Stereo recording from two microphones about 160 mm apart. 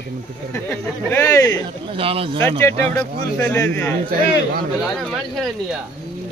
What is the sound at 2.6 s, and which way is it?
Speech, 10° left (ahead or behind).